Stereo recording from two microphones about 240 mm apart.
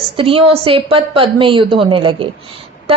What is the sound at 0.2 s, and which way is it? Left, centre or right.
A woman's voice, right.